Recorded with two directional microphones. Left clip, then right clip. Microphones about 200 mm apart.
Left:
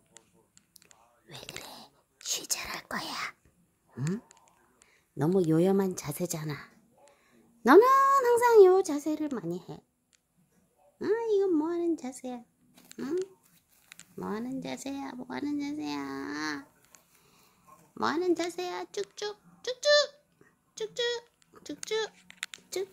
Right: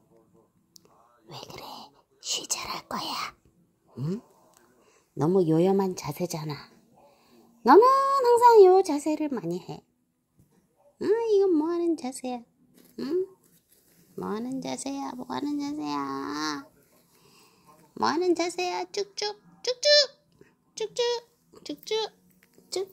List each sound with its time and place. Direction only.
1.2 s whispering: 10° left (ahead or behind)
2.2 s speech: 15° left (ahead or behind)
3.9 s a sound: 20° left (ahead or behind)
5.1 s speech: 10° left (ahead or behind)
8.1 s child singing: 15° left (ahead or behind)
8.8 s speech: centre (ahead or behind)
11.1 s speech: 5° right (ahead or behind)
12.7 s a sound: 5° left (ahead or behind)
14.1 s speech: centre (ahead or behind)
17.9 s speech: centre (ahead or behind)